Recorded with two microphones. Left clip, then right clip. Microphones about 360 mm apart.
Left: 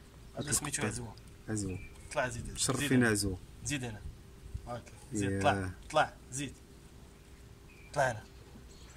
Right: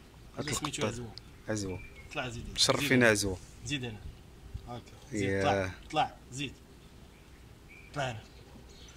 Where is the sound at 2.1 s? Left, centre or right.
Left.